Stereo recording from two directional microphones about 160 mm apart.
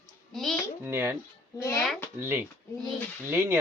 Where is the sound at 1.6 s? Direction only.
15° left (ahead or behind).